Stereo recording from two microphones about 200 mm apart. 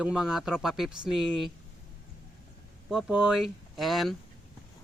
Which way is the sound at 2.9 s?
5° right (ahead or behind).